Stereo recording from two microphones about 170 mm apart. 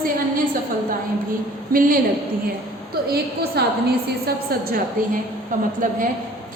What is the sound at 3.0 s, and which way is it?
A woman's voice, 65° right (ahead or behind).